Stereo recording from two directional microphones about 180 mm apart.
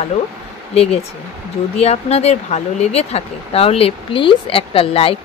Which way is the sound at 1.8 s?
35° left (ahead or behind).